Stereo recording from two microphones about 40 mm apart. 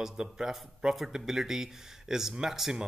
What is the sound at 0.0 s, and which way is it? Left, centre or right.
Speech, centre.